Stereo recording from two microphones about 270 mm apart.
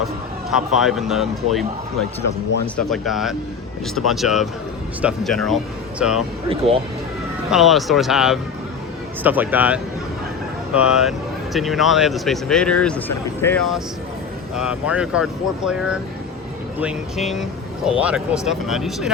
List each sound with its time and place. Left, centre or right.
0.5 s speech: centre
6.5 s speech: right
7.5 s speech: centre